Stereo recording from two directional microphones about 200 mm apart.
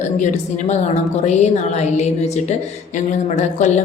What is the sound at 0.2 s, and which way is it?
A woman's voice, 35° left (ahead or behind).